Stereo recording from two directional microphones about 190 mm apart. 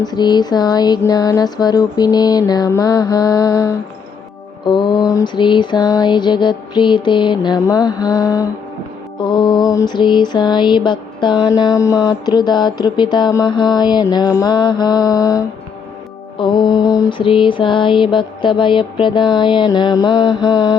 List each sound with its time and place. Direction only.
0.0 s mantra: 20° left (ahead or behind)